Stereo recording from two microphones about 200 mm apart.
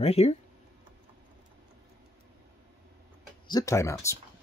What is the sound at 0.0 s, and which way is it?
Speech, 30° left (ahead or behind).